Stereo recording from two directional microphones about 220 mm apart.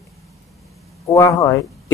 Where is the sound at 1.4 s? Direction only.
15° left (ahead or behind).